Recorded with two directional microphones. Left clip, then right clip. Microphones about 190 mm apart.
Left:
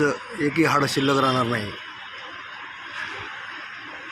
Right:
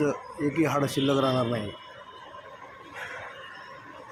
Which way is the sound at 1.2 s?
15° left (ahead or behind).